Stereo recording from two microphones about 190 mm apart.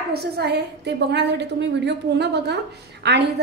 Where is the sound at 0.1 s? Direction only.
60° right (ahead or behind).